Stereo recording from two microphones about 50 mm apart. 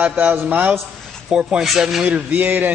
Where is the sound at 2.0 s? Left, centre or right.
Right.